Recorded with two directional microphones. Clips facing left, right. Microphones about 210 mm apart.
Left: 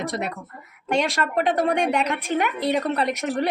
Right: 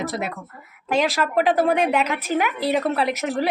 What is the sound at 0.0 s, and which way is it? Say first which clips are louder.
A woman's voice: right 1 dB; centre (ahead or behind).